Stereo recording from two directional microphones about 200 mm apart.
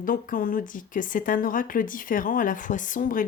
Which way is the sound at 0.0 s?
45° left (ahead or behind).